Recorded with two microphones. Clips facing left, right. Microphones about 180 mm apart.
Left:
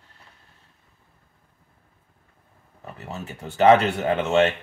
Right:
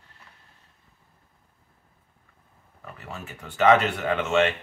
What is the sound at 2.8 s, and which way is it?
Speech, 25° left (ahead or behind).